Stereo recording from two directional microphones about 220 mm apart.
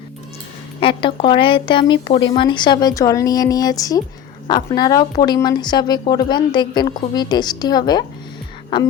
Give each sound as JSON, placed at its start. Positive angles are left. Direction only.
{"t": 0.8, "sound": "speech", "side_deg": 25}